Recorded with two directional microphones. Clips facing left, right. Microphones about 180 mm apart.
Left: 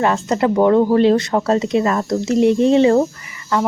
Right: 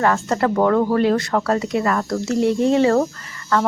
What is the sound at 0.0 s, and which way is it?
Speech, 20° left (ahead or behind).